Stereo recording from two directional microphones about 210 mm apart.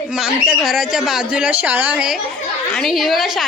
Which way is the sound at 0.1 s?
Centre (ahead or behind).